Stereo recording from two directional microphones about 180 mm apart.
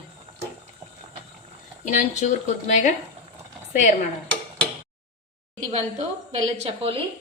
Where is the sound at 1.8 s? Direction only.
40° left (ahead or behind).